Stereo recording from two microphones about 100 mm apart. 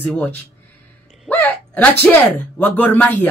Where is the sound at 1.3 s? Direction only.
20° left (ahead or behind).